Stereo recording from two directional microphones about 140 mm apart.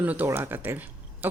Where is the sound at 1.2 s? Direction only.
15° right (ahead or behind).